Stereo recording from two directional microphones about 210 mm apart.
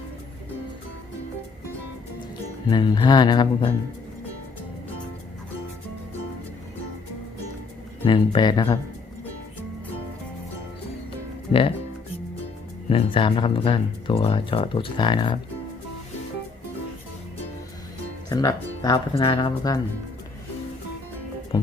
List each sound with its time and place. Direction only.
2.6 s speech: 20° left (ahead or behind)
8.0 s speech: 25° left (ahead or behind)
12.9 s speech: 25° left (ahead or behind)
18.3 s speech: 20° left (ahead or behind)
21.5 s speech: 20° left (ahead or behind)